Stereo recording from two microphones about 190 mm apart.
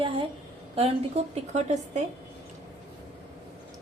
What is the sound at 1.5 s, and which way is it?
Speech, 40° right (ahead or behind).